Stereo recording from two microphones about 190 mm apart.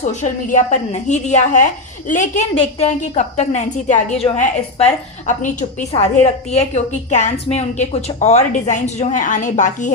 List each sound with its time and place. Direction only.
0.0 s a woman's voice: 40° left (ahead or behind)